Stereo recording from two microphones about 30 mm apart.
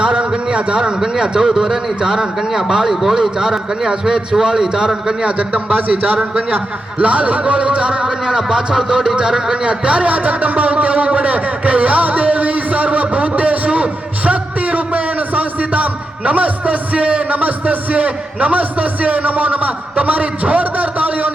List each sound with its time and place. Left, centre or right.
0.0 s a sound: right
1.0 s a man's voice: centre
2.9 s speech: centre
3.8 s a man's voice: right
5.2 s a man's voice: right
7.0 s speech: right
8.3 s a man's voice: right
9.6 s a man's voice: right